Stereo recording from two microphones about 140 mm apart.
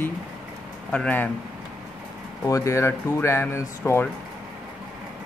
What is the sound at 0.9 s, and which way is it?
Speech, 10° left (ahead or behind).